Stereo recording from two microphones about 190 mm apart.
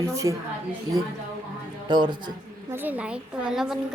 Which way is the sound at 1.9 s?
25° right (ahead or behind).